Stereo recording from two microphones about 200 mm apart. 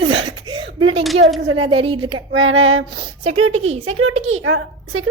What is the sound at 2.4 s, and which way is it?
Female singing, 80° right.